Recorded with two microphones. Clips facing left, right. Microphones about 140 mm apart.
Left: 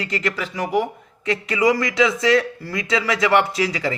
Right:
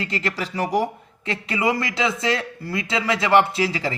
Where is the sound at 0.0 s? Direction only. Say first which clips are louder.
Left 2 dB; 30° right (ahead or behind).